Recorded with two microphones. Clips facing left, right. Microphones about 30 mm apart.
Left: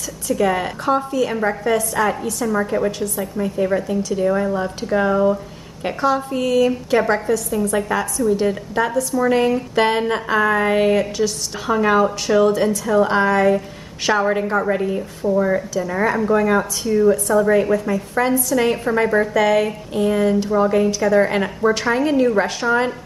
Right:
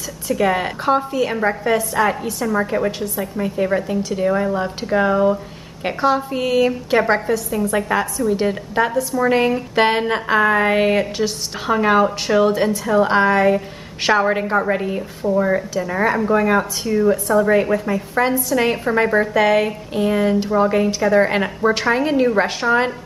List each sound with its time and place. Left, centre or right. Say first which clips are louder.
0.3 s a woman's voice: even; centre